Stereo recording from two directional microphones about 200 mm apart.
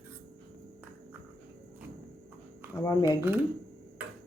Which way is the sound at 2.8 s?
15° left (ahead or behind).